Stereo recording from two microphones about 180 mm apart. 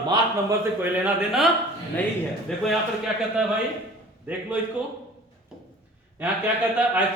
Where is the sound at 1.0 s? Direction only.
Centre (ahead or behind).